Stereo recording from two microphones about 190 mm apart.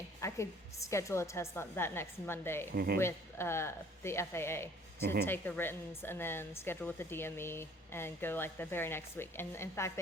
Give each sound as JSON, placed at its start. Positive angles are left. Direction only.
{"t": 0.2, "sound": "a woman's voice", "side_deg": 15}
{"t": 2.7, "sound": "speech", "side_deg": -55}
{"t": 3.0, "sound": "a woman's voice", "side_deg": 15}